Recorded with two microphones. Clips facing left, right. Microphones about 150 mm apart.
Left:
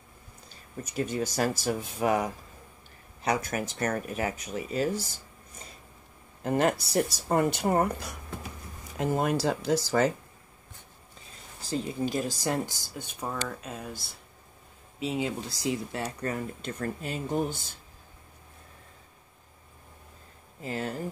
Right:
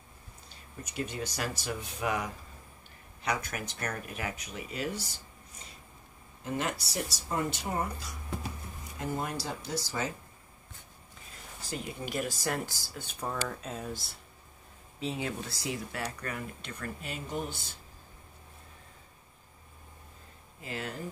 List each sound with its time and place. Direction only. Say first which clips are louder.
0.8 s speech: left 6 dB; 45° left (ahead or behind)
6.4 s speech: left 8 dB; 50° left (ahead or behind)
8.9 s speech: left 8 dB; 85° left
11.7 s speech: left 6 dB; 30° left (ahead or behind)
13.3 s speech: even; centre (ahead or behind)
15.0 s speech: left 4 dB; 15° left (ahead or behind); by 17.6 s 45° left (ahead or behind)
20.6 s speech: left 5 dB; 35° left (ahead or behind)